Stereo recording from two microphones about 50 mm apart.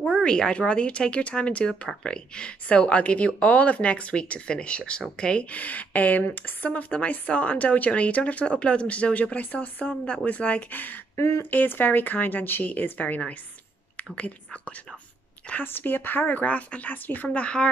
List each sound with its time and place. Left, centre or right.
0.2 s speech: centre
10.7 s speech: left
11.1 s speech: left
11.5 s speech: left
15.6 s speech: left